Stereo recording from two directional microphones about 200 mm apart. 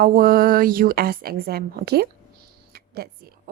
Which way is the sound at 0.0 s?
45° right (ahead or behind).